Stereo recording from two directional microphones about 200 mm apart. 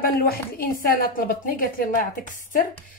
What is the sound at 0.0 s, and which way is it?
Speech, 45° left (ahead or behind).